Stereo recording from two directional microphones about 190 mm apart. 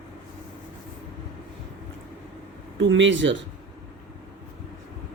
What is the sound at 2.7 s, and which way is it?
Speech, 75° right (ahead or behind).